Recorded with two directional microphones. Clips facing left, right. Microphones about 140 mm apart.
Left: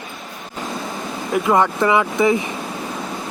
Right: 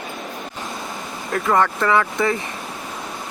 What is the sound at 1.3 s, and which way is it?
Speech, 15° left (ahead or behind).